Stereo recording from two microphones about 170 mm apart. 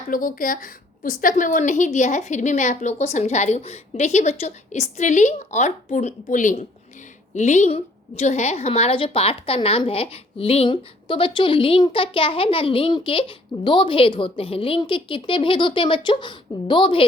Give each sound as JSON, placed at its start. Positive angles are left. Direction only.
{"t": 0.1, "sound": "a woman's voice", "side_deg": 55}